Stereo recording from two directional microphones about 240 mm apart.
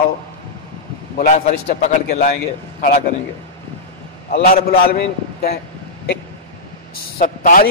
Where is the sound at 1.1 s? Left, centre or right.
Left.